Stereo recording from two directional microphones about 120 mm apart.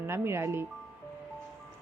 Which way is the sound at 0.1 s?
20° right (ahead or behind).